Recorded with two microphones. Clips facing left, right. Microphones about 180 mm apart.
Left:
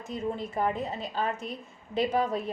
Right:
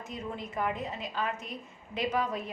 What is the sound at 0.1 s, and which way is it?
A woman's voice, 30° left (ahead or behind).